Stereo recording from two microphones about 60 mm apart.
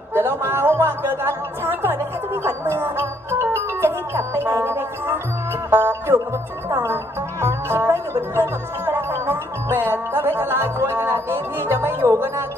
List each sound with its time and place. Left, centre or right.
0.4 s music: right
6.7 s music: right